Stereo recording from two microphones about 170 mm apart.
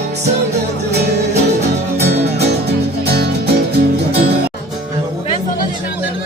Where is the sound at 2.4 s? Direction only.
75° right (ahead or behind).